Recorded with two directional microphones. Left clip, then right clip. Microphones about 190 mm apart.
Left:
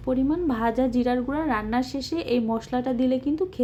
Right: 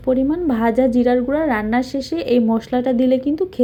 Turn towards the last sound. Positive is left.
turn(degrees=-15)  # may be behind; listen again after turning